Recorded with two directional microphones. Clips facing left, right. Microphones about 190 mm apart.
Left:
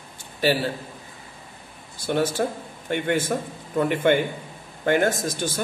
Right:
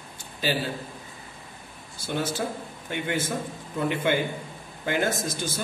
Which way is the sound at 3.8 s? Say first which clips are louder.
Left 5 dB; 55° left (ahead or behind).